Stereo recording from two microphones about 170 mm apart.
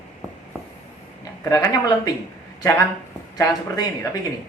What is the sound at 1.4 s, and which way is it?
Speech, 20° left (ahead or behind).